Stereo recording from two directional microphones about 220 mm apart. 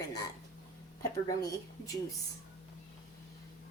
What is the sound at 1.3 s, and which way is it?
Speech, 15° left (ahead or behind).